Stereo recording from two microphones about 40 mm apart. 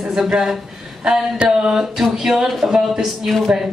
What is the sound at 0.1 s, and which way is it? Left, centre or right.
Speech, centre.